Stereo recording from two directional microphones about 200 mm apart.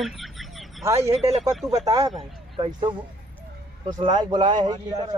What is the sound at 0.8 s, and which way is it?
Speech, 15° right (ahead or behind).